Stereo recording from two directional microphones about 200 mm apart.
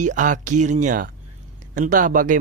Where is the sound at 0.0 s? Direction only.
40° right (ahead or behind).